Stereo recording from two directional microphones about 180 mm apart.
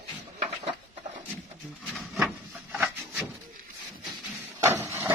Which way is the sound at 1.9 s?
Centre (ahead or behind).